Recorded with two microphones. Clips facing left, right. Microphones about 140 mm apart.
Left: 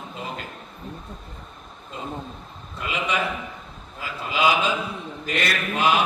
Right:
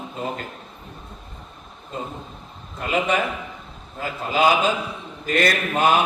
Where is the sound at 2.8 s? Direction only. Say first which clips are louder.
Right 4 dB; 45° right (ahead or behind).